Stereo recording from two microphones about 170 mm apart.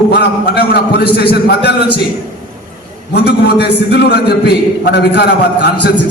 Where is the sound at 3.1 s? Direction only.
75° left (ahead or behind).